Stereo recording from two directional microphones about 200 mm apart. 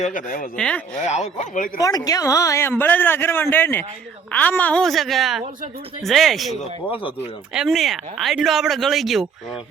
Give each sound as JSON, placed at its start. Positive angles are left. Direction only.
{"t": 0.0, "sound": "speech", "side_deg": 40}
{"t": 0.5, "sound": "speech", "side_deg": 5}
{"t": 1.0, "sound": "speech", "side_deg": 35}
{"t": 1.8, "sound": "speech", "side_deg": 20}